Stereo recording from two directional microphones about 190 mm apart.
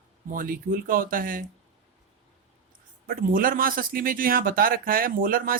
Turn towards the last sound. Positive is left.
turn(degrees=-50)  # may be behind; listen again after turning